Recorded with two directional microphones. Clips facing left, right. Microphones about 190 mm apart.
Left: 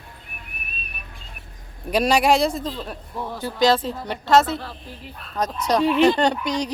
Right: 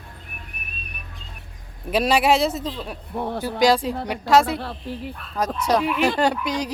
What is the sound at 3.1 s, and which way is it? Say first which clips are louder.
Speech: right 6 dB; 60° right (ahead or behind).